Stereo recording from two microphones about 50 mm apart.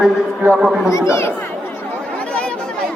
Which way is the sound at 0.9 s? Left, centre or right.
Left.